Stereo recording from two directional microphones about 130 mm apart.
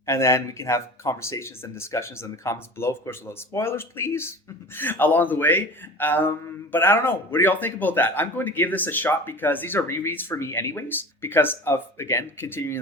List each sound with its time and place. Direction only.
0.0 s a man's voice: 20° left (ahead or behind)